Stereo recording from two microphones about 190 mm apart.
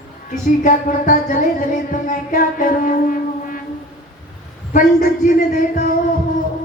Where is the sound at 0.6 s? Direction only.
45° left (ahead or behind).